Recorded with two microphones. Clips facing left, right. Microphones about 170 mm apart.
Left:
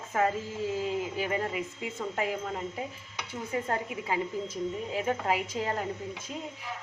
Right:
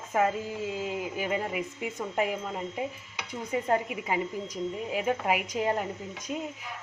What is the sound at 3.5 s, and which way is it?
Speech, 20° right (ahead or behind).